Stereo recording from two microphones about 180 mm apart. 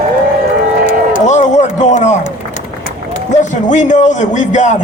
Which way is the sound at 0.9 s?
45° left (ahead or behind).